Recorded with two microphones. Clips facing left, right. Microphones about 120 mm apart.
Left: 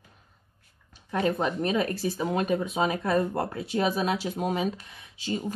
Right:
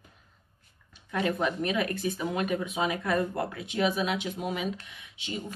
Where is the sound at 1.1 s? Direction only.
35° left (ahead or behind).